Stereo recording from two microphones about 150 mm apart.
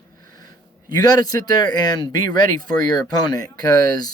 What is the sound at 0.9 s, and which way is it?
A man's voice, 25° left (ahead or behind).